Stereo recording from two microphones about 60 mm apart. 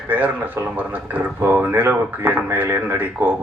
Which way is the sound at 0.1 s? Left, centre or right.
Right.